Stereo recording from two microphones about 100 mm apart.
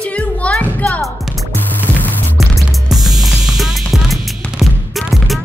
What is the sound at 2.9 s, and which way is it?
Music, centre (ahead or behind).